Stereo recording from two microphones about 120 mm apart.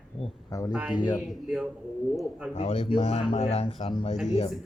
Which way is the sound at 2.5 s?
55° left (ahead or behind).